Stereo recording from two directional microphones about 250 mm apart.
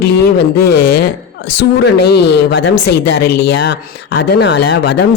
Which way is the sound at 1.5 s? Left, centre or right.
Left.